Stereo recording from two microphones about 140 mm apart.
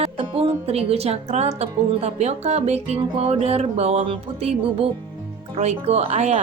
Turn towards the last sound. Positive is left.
turn(degrees=-50)  # may be behind; listen again after turning